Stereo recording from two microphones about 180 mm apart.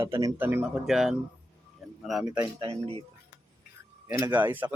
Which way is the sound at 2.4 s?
30° right (ahead or behind).